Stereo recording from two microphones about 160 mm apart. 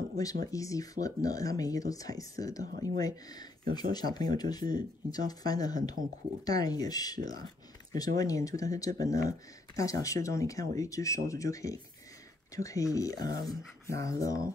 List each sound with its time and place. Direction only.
0.5 s speech: 20° left (ahead or behind)